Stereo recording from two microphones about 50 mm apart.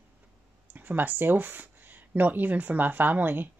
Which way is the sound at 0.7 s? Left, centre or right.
Right.